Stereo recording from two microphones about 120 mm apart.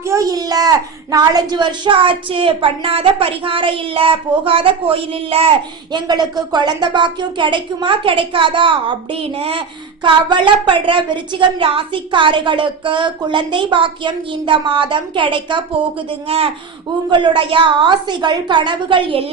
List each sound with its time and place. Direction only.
0.1 s a woman's voice: 30° right (ahead or behind); by 5.5 s 50° right (ahead or behind)
5.9 s a woman's voice: 35° right (ahead or behind)
17.1 s speech: 40° right (ahead or behind)